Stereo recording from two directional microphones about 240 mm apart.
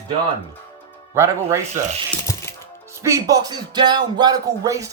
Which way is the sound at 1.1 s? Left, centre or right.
Centre.